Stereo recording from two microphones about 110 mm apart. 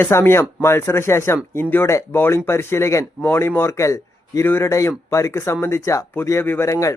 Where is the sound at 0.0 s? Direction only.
20° left (ahead or behind).